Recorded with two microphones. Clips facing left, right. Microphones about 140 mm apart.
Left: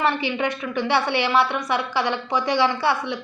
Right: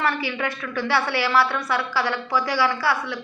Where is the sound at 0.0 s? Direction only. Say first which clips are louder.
Left 3 dB; 20° left (ahead or behind).